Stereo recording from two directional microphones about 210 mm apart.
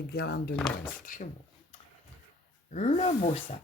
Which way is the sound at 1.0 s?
40° left (ahead or behind).